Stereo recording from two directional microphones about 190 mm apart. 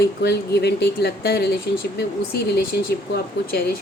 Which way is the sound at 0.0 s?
60° left (ahead or behind).